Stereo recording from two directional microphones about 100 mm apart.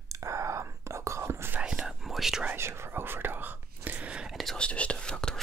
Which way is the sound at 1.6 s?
10° right (ahead or behind).